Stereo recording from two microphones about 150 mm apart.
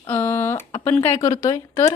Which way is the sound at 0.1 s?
15° left (ahead or behind).